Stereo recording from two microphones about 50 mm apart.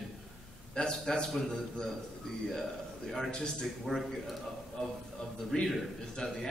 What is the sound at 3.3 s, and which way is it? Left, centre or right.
Speech, centre.